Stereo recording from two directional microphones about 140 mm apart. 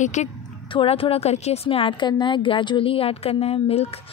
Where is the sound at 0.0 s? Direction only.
60° left (ahead or behind).